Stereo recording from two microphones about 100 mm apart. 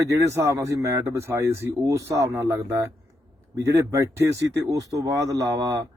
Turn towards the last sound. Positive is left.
turn(degrees=-35)  # may be behind; listen again after turning